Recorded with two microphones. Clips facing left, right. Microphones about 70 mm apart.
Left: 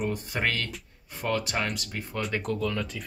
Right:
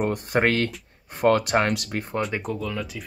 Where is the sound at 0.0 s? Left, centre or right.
Right.